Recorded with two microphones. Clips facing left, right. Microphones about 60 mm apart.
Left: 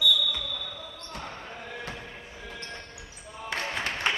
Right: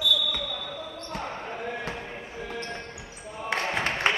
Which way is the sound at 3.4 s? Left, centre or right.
Right.